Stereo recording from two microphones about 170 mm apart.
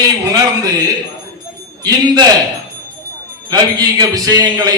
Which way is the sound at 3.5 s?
20° right (ahead or behind).